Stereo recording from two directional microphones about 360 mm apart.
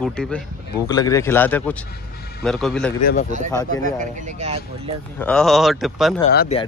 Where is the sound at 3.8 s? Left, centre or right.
Right.